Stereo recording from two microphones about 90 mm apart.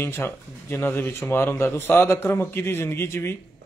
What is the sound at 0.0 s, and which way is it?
Speech, 25° left (ahead or behind).